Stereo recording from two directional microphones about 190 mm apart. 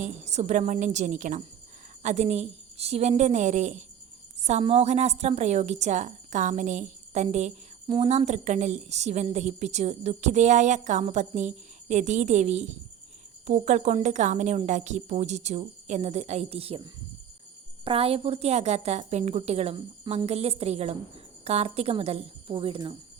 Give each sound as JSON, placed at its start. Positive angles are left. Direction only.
{"t": 0.0, "sound": "a woman's voice", "side_deg": -35}